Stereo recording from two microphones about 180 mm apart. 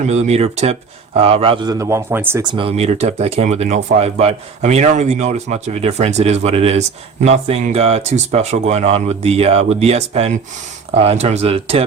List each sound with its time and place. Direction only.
0.0 s speech: 40° right (ahead or behind); by 2.4 s 10° right (ahead or behind)
2.4 s speech: 25° right (ahead or behind)